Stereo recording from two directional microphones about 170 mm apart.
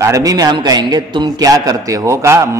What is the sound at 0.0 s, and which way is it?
A man's voice, 20° right (ahead or behind).